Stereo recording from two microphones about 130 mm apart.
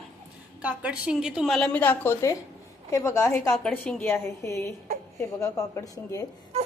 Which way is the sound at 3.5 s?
10° left (ahead or behind).